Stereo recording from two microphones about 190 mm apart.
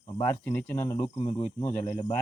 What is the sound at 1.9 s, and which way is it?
Speech, 35° left (ahead or behind).